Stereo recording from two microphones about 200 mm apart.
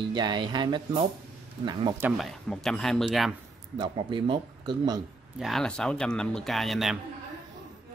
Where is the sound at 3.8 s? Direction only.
25° right (ahead or behind).